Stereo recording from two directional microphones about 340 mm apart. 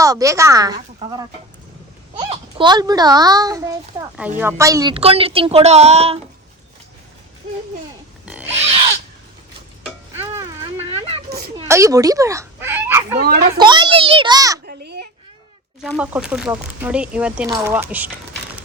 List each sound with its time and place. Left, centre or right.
0.0 s a child's voice: centre
8.2 s pig: centre
8.6 s a sound: centre
9.8 s stir: centre
11.3 s a sound: right
11.5 s a sound: centre
13.2 s a child's voice: right
13.6 s a child's voice: centre
14.7 s a child's voice: right
15.8 s speech: centre